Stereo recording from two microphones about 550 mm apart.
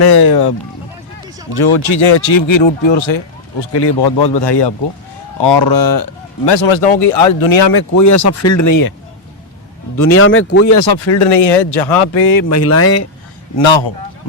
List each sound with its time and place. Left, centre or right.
0.0 s speech: left
1.6 s speech: left
7.5 s speech: left
10.0 s speech: left
11.8 s speech: left
12.3 s speech: left
13.6 s speech: left